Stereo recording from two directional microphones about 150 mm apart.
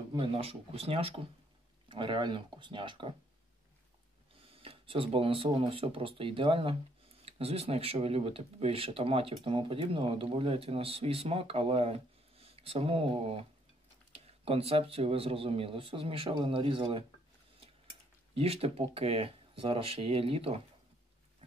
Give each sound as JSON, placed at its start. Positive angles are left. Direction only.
{"t": 0.1, "sound": "speech", "side_deg": -40}
{"t": 4.6, "sound": "speech", "side_deg": -40}
{"t": 18.3, "sound": "speech", "side_deg": -40}